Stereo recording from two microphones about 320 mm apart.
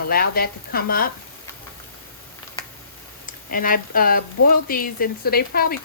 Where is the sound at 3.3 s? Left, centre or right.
Left.